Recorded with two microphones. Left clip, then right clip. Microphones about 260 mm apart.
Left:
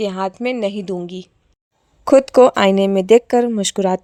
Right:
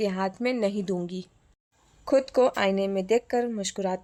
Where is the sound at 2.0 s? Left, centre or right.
Left.